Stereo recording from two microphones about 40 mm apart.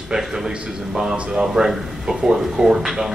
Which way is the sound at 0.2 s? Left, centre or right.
Centre.